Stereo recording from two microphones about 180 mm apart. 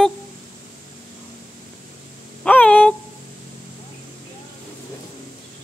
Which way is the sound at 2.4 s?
5° left (ahead or behind).